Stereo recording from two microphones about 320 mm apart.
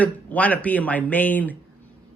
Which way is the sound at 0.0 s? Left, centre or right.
Centre.